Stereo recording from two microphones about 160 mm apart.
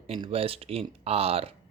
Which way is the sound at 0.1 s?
35° right (ahead or behind).